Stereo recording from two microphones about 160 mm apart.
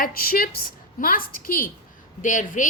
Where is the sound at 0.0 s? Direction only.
65° left (ahead or behind).